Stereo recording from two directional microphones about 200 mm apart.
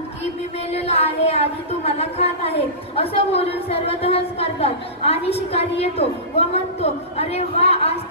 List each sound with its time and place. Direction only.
0.2 s a woman's voice: 30° left (ahead or behind)